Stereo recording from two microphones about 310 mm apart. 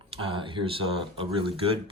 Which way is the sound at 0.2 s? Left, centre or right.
Centre.